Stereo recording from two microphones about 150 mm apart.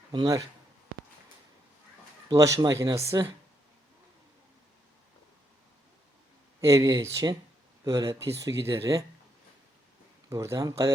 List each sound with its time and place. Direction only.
0.1 s speech: 25° right (ahead or behind)
2.3 s speech: 20° right (ahead or behind)
6.6 s speech: 20° right (ahead or behind)
10.2 s speech: 20° right (ahead or behind)